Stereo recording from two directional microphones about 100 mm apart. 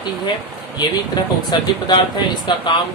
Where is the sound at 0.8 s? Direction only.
45° left (ahead or behind).